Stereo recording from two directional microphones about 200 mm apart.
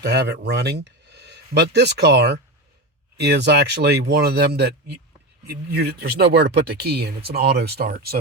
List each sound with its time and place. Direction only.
0.1 s speech: 55° right (ahead or behind)